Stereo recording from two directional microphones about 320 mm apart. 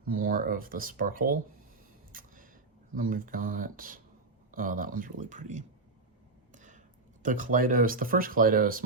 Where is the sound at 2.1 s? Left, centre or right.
Right.